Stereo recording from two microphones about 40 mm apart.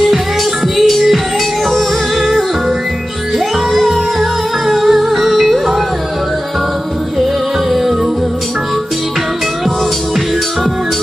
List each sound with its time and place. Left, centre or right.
0.7 s music: centre
3.7 s music: centre